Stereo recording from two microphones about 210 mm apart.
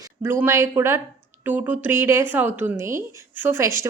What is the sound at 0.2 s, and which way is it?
A woman's voice, 10° right (ahead or behind).